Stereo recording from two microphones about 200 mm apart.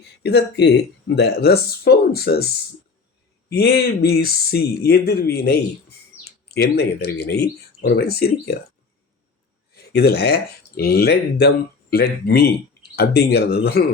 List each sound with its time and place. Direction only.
0.0 s speech: 55° left (ahead or behind)
3.5 s speech: 50° left (ahead or behind)
9.7 s speech: 50° left (ahead or behind)